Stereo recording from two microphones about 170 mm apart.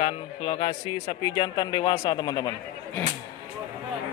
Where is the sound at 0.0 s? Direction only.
30° left (ahead or behind).